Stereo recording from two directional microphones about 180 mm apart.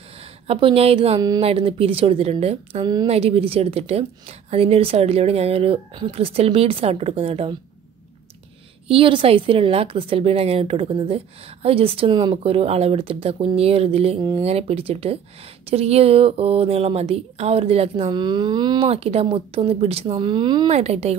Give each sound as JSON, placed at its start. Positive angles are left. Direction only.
{"t": 0.5, "sound": "a woman's voice", "side_deg": -30}
{"t": 8.8, "sound": "a woman's voice", "side_deg": -30}
{"t": 20.7, "sound": "a woman's voice", "side_deg": -35}